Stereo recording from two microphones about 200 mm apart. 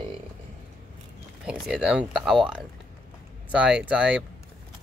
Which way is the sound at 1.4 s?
5° right (ahead or behind).